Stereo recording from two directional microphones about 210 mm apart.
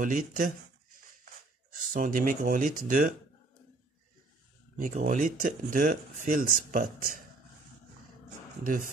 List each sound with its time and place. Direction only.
0.0 s speech: 40° right (ahead or behind)
1.9 s speech: 40° right (ahead or behind)
4.7 s speech: 40° right (ahead or behind)